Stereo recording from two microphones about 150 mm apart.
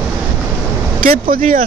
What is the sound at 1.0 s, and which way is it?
Speech, 75° right (ahead or behind).